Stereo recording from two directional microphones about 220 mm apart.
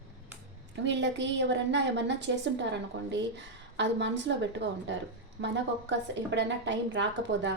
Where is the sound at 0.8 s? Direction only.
55° right (ahead or behind).